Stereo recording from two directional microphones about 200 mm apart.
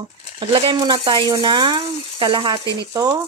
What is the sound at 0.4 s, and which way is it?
Speech, 25° right (ahead or behind).